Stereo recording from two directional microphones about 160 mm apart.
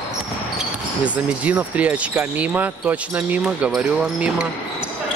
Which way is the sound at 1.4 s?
10° right (ahead or behind).